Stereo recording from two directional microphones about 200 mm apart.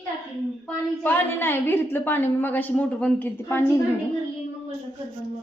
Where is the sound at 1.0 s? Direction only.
10° left (ahead or behind).